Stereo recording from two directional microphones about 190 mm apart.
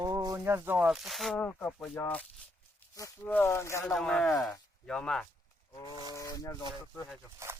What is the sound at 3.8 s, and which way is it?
Speech, centre (ahead or behind).